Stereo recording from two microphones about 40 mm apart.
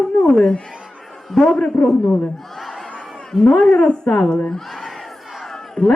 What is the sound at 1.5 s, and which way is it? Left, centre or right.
Music, left.